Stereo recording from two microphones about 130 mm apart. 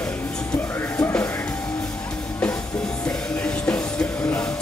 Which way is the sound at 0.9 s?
10° left (ahead or behind).